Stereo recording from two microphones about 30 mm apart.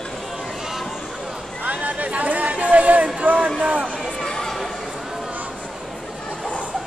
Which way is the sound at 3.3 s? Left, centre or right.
Right.